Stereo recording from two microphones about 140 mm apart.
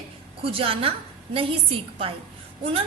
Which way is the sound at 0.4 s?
40° right (ahead or behind).